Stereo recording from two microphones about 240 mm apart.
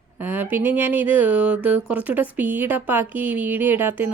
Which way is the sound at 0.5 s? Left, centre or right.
Centre.